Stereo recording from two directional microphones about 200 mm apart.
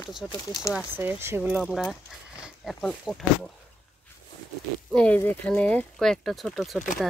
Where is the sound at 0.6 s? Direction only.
5° right (ahead or behind).